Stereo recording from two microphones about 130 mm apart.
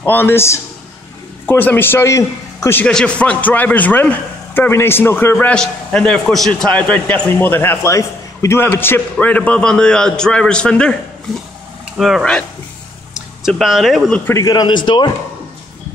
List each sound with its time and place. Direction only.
0.0 s a man's voice: 15° left (ahead or behind)
2.8 s a man's voice: 5° left (ahead or behind)
12.0 s speech: centre (ahead or behind)
14.2 s a man's voice: 25° left (ahead or behind)